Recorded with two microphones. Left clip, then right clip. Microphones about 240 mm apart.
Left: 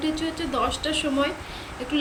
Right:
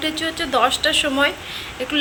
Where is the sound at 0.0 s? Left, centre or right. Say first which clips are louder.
Right 5 dB; centre.